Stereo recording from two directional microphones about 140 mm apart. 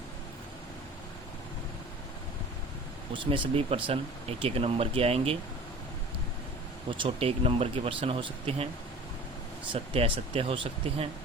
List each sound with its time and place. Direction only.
3.1 s speech: 35° right (ahead or behind)
6.9 s speech: 40° right (ahead or behind)
9.7 s speech: 45° right (ahead or behind)